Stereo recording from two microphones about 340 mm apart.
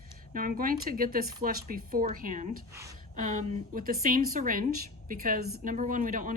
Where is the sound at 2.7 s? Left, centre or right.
Centre.